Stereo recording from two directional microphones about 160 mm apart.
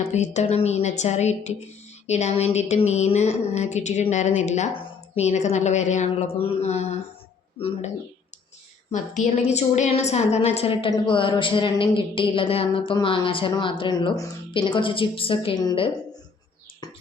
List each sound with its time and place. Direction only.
0.0 s a woman's voice: 45° left (ahead or behind)
8.9 s a woman's voice: 45° left (ahead or behind); by 15.9 s 30° left (ahead or behind)